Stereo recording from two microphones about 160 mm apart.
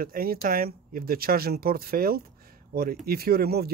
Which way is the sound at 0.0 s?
65° right (ahead or behind).